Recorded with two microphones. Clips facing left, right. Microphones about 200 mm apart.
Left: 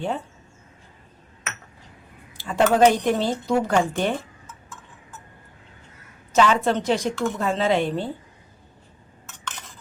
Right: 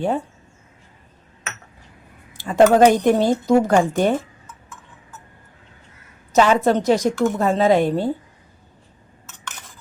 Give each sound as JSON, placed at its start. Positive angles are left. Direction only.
{"t": 2.4, "sound": "a woman's voice", "side_deg": -45}
{"t": 6.3, "sound": "a woman's voice", "side_deg": -40}